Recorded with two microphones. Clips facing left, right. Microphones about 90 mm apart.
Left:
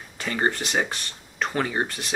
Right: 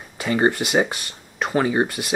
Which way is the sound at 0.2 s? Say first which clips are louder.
Right 6 dB; 10° right (ahead or behind).